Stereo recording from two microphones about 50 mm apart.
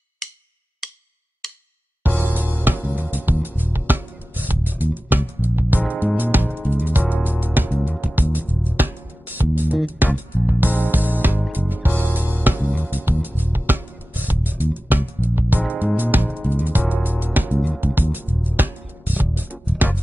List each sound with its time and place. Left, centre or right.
2.0 s music: right